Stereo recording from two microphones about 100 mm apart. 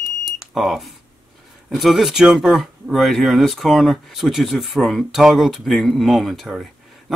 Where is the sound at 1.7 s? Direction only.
Centre (ahead or behind).